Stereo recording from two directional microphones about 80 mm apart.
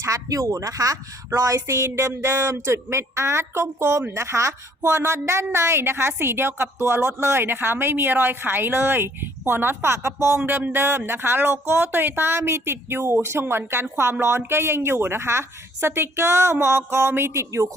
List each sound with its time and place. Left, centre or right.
0.0 s a woman's voice: right